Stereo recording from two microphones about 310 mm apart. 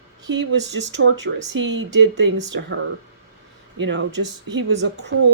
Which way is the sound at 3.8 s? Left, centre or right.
Right.